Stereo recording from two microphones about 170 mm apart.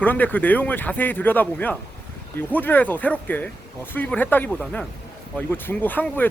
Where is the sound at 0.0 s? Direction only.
10° left (ahead or behind).